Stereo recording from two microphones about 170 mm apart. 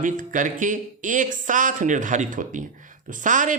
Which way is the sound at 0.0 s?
50° right (ahead or behind).